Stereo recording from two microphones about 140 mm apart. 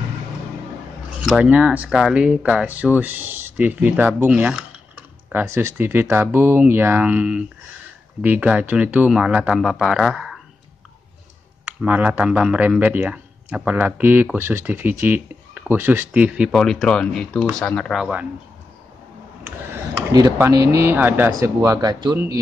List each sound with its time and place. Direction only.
1.2 s speech: 5° right (ahead or behind)
11.8 s speech: 10° right (ahead or behind)
16.5 s speech: 5° left (ahead or behind)
20.1 s speech: 25° right (ahead or behind)